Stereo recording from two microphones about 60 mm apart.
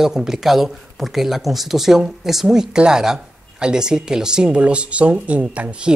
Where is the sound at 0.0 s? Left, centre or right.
Centre.